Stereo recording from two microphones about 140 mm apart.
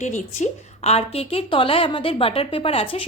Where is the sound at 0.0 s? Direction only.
55° left (ahead or behind).